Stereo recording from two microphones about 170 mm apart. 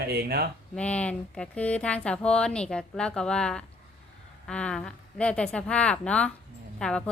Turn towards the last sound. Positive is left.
turn(degrees=5)  # may be behind; listen again after turning